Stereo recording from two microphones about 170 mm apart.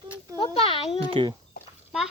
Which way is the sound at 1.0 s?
30° right (ahead or behind).